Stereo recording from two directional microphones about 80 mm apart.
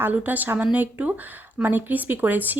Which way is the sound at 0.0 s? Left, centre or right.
Right.